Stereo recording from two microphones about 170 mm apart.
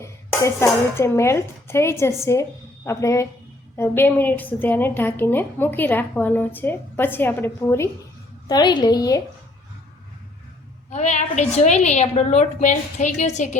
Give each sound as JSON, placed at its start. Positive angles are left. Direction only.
{"t": 0.0, "sound": "a woman's voice", "side_deg": 15}
{"t": 10.9, "sound": "a woman's voice", "side_deg": 45}